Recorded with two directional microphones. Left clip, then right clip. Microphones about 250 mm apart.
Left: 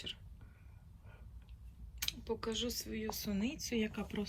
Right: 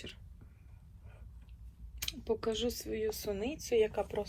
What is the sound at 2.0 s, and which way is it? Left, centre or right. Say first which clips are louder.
Speech: right 4 dB; centre.